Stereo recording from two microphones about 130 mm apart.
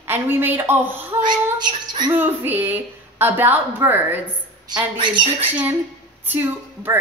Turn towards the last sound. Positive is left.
turn(degrees=-15)  # may be behind; listen again after turning